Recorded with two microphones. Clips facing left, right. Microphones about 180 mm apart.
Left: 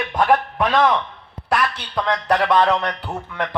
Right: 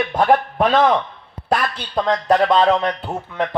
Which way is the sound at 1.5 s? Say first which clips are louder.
Right 1 dB; 40° right (ahead or behind).